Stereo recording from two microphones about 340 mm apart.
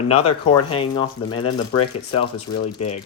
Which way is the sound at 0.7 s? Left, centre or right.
Centre.